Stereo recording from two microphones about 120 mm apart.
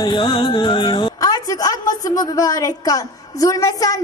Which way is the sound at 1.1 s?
30° left (ahead or behind).